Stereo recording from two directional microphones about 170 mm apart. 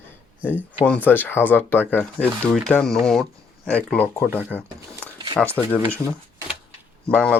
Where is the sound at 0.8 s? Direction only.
10° left (ahead or behind).